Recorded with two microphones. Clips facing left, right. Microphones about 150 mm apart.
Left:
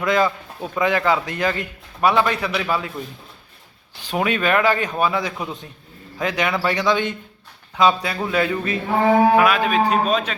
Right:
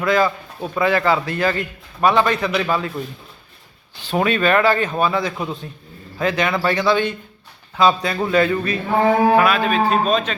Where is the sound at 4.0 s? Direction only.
10° left (ahead or behind).